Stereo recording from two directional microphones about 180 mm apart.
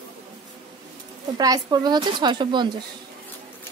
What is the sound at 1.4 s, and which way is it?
A woman's voice, 20° right (ahead or behind).